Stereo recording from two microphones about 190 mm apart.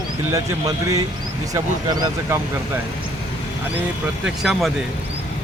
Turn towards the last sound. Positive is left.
turn(degrees=0)  # may be behind; listen again after turning